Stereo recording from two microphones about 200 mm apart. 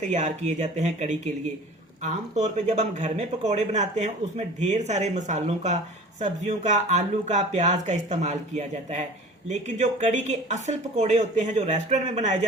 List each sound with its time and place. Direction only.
0.1 s speech: 35° right (ahead or behind)